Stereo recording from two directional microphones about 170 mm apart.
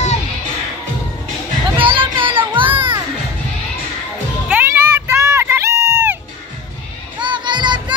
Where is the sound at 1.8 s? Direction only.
30° right (ahead or behind).